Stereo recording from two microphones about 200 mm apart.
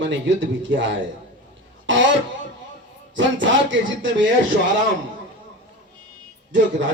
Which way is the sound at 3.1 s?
70° right (ahead or behind).